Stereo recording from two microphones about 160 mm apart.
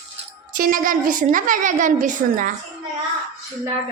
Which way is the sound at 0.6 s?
60° right (ahead or behind).